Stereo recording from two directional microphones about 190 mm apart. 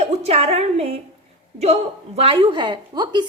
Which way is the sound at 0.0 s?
35° right (ahead or behind).